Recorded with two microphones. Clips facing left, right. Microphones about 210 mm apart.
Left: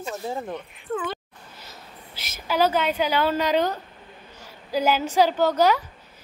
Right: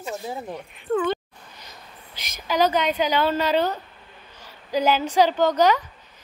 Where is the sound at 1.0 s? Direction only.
5° left (ahead or behind).